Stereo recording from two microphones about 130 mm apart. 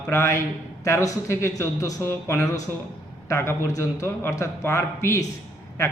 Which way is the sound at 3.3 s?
20° left (ahead or behind).